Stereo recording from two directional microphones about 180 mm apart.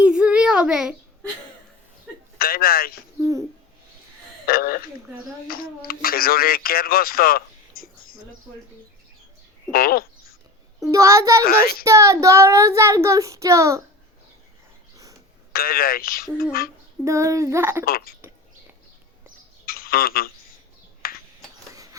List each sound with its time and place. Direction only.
0.0 s child singing: 5° right (ahead or behind)
2.4 s speech: 55° left (ahead or behind)
4.4 s a sound: 55° left (ahead or behind)
5.9 s speech: 55° left (ahead or behind)
9.7 s speech: 55° left (ahead or behind)
10.9 s child singing: 15° right (ahead or behind)
11.4 s speech: 55° left (ahead or behind)
11.8 s child singing: 15° right (ahead or behind)
15.5 s speech: 55° left (ahead or behind)
17.0 s child singing: 15° right (ahead or behind)
17.8 s speech: 55° left (ahead or behind)
19.6 s a sound: 55° left (ahead or behind)